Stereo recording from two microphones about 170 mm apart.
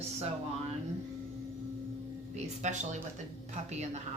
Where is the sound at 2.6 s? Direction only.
45° right (ahead or behind).